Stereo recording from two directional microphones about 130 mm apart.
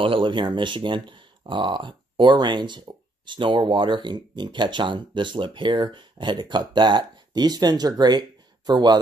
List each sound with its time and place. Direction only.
0.0 s speech: 40° right (ahead or behind)